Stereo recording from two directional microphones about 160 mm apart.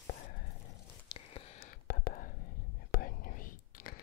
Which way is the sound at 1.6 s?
70° left (ahead or behind).